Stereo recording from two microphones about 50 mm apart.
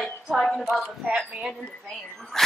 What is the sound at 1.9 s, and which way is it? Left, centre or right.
Speech, centre.